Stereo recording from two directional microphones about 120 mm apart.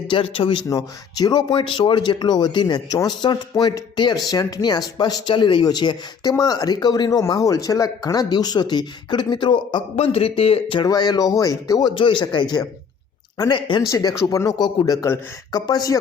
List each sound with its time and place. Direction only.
0.1 s speech: 50° left (ahead or behind)
0.7 s speech: 35° left (ahead or behind)
9.9 s speech: 55° left (ahead or behind)
10.8 s speech: 35° left (ahead or behind)
13.9 s speech: 30° left (ahead or behind)